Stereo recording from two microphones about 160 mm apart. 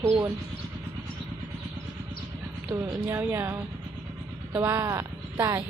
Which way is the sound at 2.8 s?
10° right (ahead or behind).